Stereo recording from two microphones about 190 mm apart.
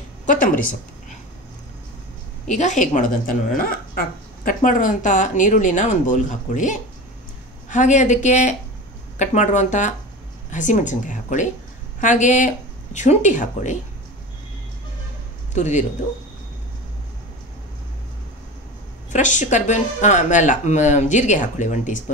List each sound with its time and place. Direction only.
2.4 s speech: 40° left (ahead or behind)
15.5 s speech: 40° left (ahead or behind)
19.1 s speech: 40° left (ahead or behind)